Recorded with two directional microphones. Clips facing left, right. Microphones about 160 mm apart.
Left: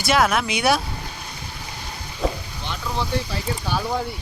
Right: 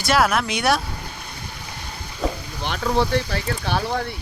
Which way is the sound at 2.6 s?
65° right (ahead or behind).